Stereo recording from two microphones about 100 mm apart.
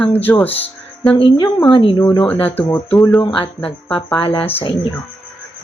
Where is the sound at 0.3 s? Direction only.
15° left (ahead or behind).